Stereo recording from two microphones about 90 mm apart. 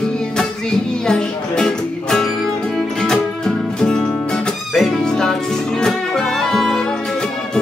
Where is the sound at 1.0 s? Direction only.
10° left (ahead or behind).